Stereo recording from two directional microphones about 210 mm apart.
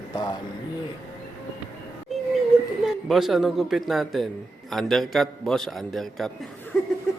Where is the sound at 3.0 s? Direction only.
Centre (ahead or behind).